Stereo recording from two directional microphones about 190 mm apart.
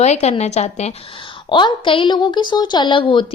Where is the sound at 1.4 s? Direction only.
25° left (ahead or behind).